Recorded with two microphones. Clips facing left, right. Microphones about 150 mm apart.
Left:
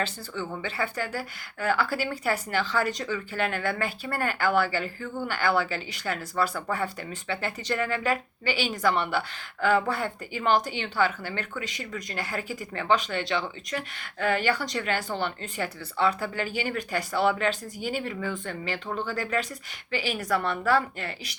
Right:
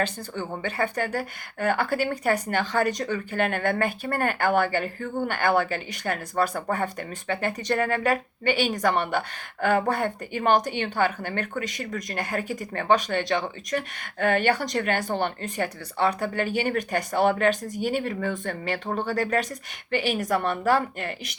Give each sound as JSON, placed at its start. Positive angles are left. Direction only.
{"t": 0.6, "sound": "a woman's voice", "side_deg": -50}
{"t": 19.9, "sound": "a woman's voice", "side_deg": -60}
{"t": 20.5, "sound": "a woman's voice", "side_deg": -45}